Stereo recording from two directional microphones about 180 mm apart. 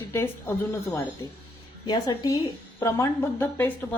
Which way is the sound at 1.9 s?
25° left (ahead or behind).